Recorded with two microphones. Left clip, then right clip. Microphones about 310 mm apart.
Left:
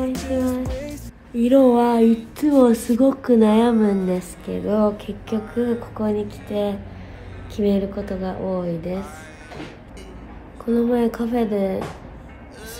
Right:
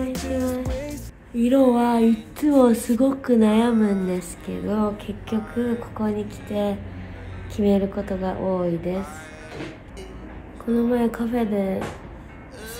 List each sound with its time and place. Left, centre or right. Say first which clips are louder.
0.1 s music: left 2 dB; centre
7.5 s a woman's voice: even; centre
10.7 s a woman's voice: left 2 dB; centre